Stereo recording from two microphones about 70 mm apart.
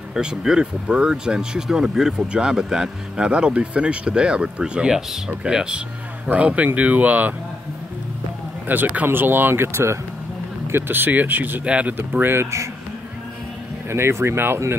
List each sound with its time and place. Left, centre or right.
0.1 s speech: centre
8.6 s speech: right
11.6 s speech: centre
12.0 s speech: right
13.8 s speech: right